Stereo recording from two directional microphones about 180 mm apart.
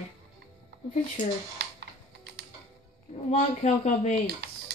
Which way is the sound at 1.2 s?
45° left (ahead or behind).